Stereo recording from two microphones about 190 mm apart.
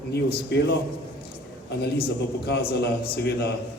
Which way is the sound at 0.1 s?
60° left (ahead or behind).